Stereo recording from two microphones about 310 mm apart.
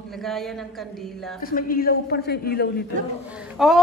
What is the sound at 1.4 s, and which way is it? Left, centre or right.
A man's voice, left.